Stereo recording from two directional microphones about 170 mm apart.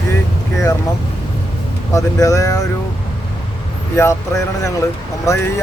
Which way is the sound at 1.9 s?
20° left (ahead or behind).